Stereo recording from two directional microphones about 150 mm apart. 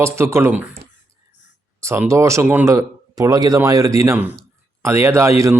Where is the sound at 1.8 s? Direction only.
15° right (ahead or behind).